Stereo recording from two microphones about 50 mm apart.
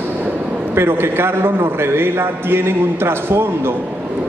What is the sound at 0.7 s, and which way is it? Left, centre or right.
A man's voice, right.